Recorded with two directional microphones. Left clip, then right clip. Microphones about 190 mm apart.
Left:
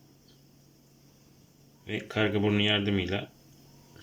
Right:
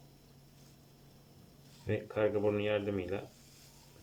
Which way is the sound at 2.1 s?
15° left (ahead or behind).